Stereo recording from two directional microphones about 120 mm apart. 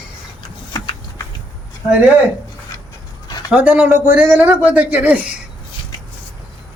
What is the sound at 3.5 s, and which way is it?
Speech, 10° right (ahead or behind).